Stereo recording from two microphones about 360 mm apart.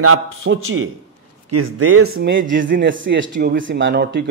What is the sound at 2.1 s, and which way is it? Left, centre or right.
A man's voice, right.